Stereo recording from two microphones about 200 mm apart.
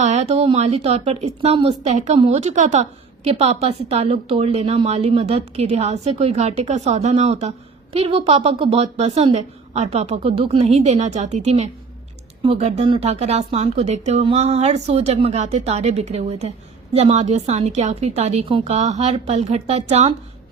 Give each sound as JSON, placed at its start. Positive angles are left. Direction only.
{"t": 0.0, "sound": "a woman's voice", "side_deg": -35}